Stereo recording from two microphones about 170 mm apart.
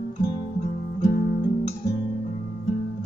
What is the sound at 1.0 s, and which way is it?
Music, 55° left (ahead or behind).